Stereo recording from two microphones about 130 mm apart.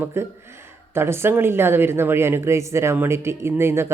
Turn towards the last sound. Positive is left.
turn(degrees=-20)  # may be behind; listen again after turning